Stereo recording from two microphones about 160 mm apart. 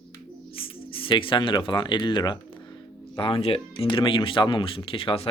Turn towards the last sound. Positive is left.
turn(degrees=35)  # may be behind; listen again after turning